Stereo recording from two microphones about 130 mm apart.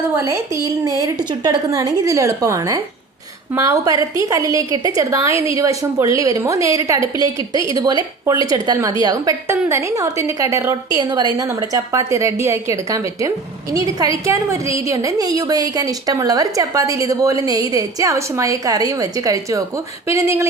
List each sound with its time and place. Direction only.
0.2 s a woman's voice: 20° right (ahead or behind)